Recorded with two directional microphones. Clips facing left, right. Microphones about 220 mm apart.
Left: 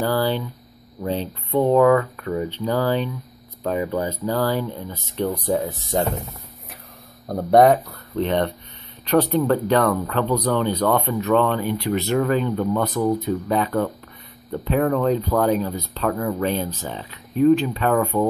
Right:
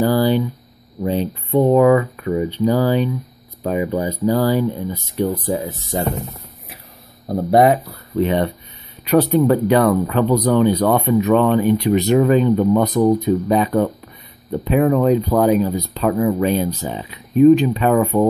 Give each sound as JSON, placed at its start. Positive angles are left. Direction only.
{"t": 0.0, "sound": "a sound", "side_deg": -15}
{"t": 1.0, "sound": "speech", "side_deg": -15}
{"t": 7.5, "sound": "speech", "side_deg": -5}